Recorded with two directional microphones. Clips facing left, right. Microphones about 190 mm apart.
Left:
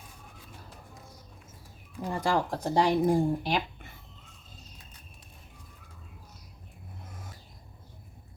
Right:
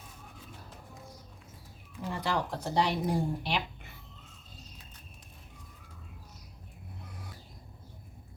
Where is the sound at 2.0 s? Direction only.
45° left (ahead or behind).